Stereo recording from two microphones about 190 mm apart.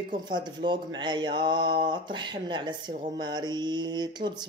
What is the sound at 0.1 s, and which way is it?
Speech, 25° right (ahead or behind).